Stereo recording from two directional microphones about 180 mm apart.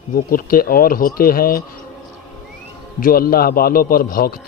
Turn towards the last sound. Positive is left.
turn(degrees=55)  # may be behind; listen again after turning